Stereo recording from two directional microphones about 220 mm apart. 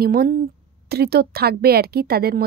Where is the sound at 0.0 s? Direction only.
45° right (ahead or behind).